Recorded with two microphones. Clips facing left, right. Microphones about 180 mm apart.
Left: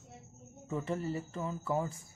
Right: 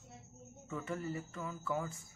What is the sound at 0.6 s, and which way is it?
Speech, 30° left (ahead or behind).